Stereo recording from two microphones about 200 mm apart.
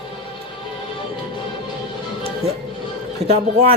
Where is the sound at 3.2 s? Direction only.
30° right (ahead or behind).